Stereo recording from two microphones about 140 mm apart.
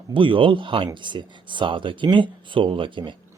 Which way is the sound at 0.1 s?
35° right (ahead or behind).